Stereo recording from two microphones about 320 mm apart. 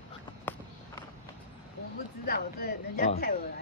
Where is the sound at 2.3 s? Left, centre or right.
Left.